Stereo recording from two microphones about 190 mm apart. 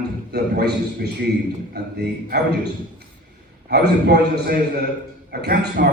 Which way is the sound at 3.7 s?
55° right (ahead or behind).